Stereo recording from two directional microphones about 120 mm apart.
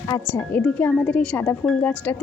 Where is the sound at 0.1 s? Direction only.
30° left (ahead or behind).